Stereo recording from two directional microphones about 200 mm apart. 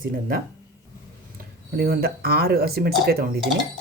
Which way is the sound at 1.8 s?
50° right (ahead or behind).